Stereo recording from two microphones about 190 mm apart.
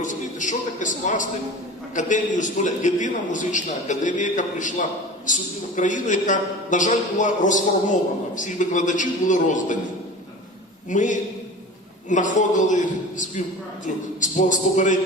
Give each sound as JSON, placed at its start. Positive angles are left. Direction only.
{"t": 0.0, "sound": "a man's voice", "side_deg": 40}
{"t": 10.8, "sound": "a man's voice", "side_deg": 40}